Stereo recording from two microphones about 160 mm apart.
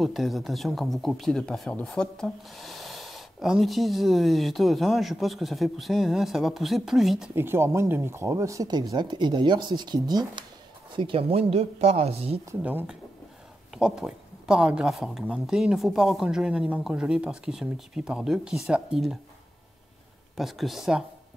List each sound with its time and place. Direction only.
0.0 s speech: centre (ahead or behind)
7.3 s speech: 15° right (ahead or behind); by 12.4 s 40° right (ahead or behind)
12.4 s speech: 10° right (ahead or behind)
20.3 s speech: centre (ahead or behind)